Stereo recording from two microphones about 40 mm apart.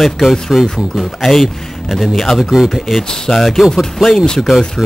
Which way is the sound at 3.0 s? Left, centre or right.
Centre.